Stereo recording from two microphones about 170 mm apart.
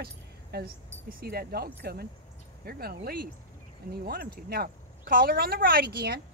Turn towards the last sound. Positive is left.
turn(degrees=-70)  # may be behind; listen again after turning